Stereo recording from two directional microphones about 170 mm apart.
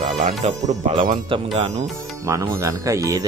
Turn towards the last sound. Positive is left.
turn(degrees=-20)  # may be behind; listen again after turning